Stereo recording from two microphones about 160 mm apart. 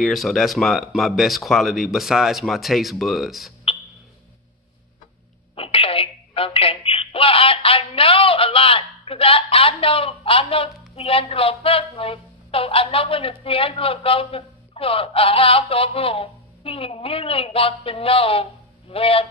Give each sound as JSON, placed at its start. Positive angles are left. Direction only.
{"t": 0.0, "sound": "speech", "side_deg": 0}
{"t": 5.6, "sound": "telephone", "side_deg": 35}
{"t": 11.0, "sound": "speech", "side_deg": 35}